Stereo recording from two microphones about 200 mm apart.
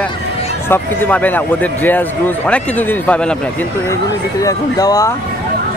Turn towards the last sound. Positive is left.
turn(degrees=15)  # may be behind; listen again after turning